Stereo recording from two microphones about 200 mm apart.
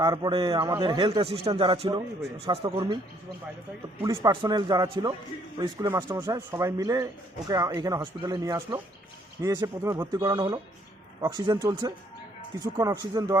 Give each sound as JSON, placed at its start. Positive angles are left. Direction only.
{"t": 0.0, "sound": "a man's voice", "side_deg": -20}
{"t": 4.0, "sound": "a man's voice", "side_deg": -20}